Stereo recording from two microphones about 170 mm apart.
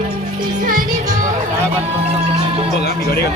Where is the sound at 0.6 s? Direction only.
55° right (ahead or behind).